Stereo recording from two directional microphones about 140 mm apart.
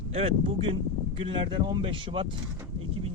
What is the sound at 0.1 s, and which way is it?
Speech, 45° right (ahead or behind).